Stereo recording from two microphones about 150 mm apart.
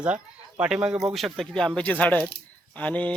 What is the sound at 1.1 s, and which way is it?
Speech, centre (ahead or behind).